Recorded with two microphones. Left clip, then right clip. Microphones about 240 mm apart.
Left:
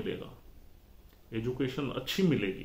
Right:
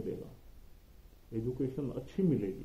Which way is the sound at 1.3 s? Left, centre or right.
Centre.